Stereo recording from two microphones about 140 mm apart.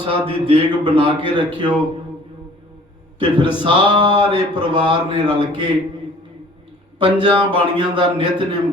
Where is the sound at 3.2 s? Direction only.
35° right (ahead or behind).